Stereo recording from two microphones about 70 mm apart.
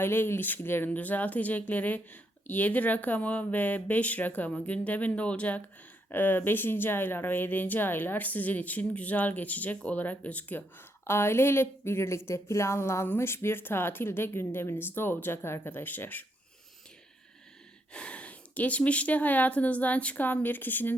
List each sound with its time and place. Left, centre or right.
0.0 s speech: left
11.0 s a woman's voice: left
17.9 s speech: centre